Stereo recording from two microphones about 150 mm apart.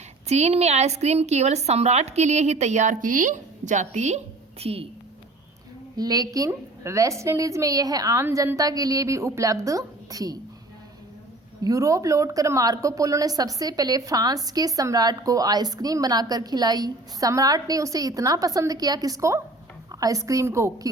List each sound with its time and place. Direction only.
0.3 s a woman's voice: 45° right (ahead or behind)
4.6 s a woman's voice: 40° right (ahead or behind)
6.0 s a woman's voice: 25° right (ahead or behind)
11.6 s a woman's voice: 20° right (ahead or behind)